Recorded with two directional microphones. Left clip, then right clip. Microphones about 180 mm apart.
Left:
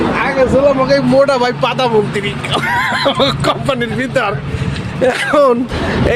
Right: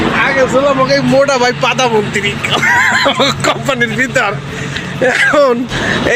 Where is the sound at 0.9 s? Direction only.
5° left (ahead or behind).